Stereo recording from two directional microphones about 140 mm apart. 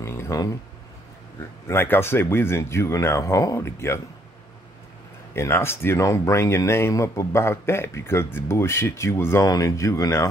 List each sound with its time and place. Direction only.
0.0 s a sound: 20° left (ahead or behind)
1.4 s speech: 20° left (ahead or behind)
5.3 s speech: 15° left (ahead or behind)